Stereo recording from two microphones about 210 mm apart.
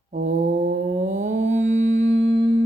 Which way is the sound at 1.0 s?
35° right (ahead or behind).